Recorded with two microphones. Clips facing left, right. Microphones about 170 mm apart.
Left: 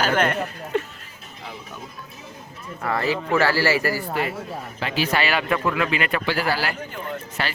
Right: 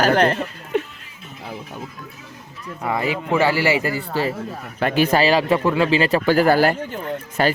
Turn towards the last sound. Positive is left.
turn(degrees=-45)  # may be behind; listen again after turning